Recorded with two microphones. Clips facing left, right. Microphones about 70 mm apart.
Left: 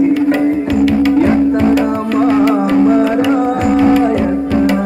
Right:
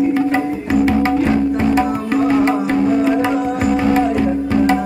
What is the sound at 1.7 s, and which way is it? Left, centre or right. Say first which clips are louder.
Music: left 3 dB; right.